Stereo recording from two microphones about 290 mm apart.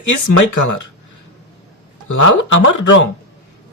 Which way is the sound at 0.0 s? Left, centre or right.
Left.